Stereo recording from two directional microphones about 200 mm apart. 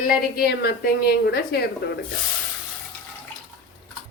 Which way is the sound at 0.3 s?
50° left (ahead or behind).